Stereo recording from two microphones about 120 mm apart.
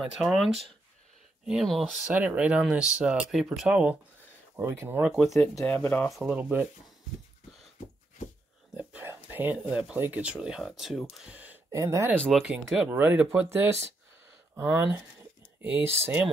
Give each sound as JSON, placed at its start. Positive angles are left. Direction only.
{"t": 0.0, "sound": "speech", "side_deg": 0}
{"t": 4.6, "sound": "speech", "side_deg": -20}
{"t": 5.1, "sound": "speech", "side_deg": 0}
{"t": 5.7, "sound": "speech", "side_deg": 15}
{"t": 6.0, "sound": "speech", "side_deg": 0}
{"t": 6.3, "sound": "speech", "side_deg": -15}
{"t": 8.7, "sound": "a sound", "side_deg": -10}
{"t": 9.1, "sound": "speech", "side_deg": -15}
{"t": 11.7, "sound": "speech", "side_deg": -25}
{"t": 12.2, "sound": "speech", "side_deg": 0}